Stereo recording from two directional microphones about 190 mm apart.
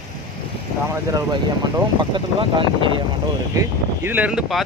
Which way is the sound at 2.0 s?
25° right (ahead or behind).